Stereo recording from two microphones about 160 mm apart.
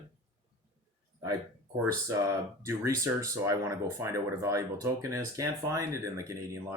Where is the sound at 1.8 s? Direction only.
20° right (ahead or behind).